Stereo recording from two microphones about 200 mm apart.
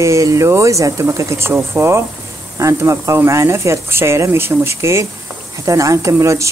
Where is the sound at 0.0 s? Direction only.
15° right (ahead or behind).